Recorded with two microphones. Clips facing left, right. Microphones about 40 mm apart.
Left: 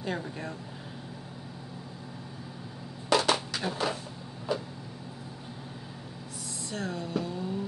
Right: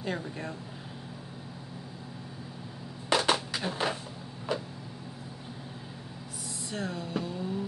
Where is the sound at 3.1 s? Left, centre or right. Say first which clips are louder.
Left 1 dB; centre.